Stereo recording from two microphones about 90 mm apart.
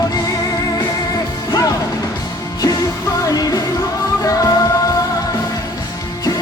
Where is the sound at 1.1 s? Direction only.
45° left (ahead or behind).